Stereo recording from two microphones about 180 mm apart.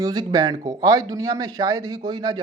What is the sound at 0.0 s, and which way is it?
A man's voice, 20° right (ahead or behind).